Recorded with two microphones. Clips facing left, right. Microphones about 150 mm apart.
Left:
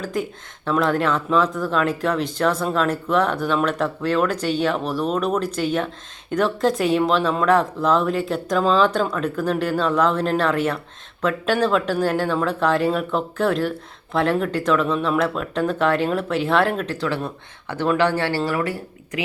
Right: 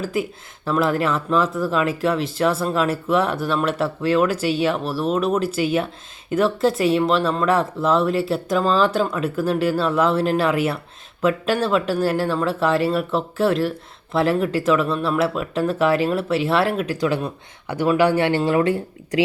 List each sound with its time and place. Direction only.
0.0 s speech: 5° right (ahead or behind); by 19.2 s 25° right (ahead or behind)